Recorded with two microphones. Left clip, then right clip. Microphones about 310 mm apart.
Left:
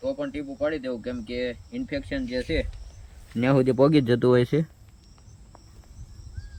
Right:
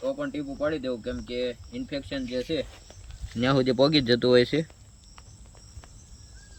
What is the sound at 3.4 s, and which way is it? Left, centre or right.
Speech, centre.